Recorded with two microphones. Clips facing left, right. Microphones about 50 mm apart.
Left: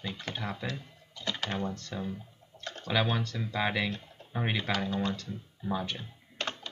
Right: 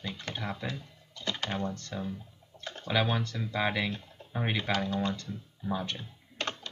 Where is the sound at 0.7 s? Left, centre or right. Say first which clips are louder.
Even; centre.